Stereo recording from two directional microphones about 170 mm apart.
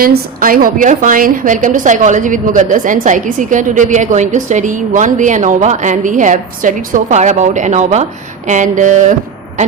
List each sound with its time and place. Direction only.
0.0 s a woman's voice: 60° right (ahead or behind)